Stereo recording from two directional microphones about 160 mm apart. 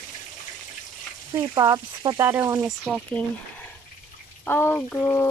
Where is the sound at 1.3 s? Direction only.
20° right (ahead or behind); by 3.0 s 5° right (ahead or behind).